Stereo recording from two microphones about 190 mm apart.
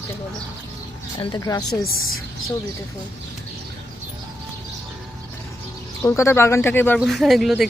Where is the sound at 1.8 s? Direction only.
90° left.